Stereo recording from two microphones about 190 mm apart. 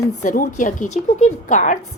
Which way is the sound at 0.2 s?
40° left (ahead or behind).